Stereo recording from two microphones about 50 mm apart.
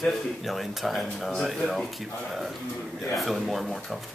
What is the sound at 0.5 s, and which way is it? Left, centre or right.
Speech, centre.